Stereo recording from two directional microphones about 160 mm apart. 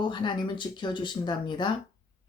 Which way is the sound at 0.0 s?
30° left (ahead or behind).